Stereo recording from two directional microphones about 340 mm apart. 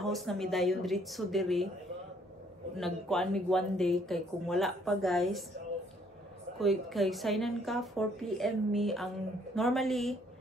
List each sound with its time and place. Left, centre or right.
0.0 s speech: centre
2.8 s speech: centre
6.6 s speech: centre